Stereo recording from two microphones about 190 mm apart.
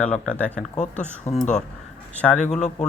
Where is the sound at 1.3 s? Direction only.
40° left (ahead or behind).